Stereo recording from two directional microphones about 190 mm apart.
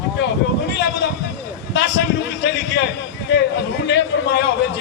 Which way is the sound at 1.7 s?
65° left (ahead or behind).